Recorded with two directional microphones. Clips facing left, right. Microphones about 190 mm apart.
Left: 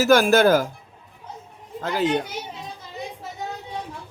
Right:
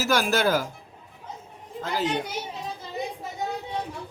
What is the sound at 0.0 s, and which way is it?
Speech, 50° left (ahead or behind).